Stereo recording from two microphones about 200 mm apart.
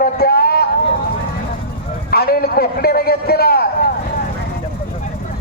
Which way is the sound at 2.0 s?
50° left (ahead or behind).